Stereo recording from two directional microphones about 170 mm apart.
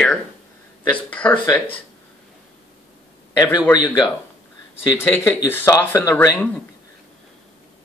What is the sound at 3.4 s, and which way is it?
Speech, 25° left (ahead or behind).